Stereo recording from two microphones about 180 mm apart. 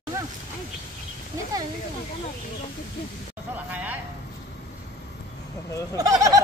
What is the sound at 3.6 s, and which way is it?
Vehicle, 10° right (ahead or behind).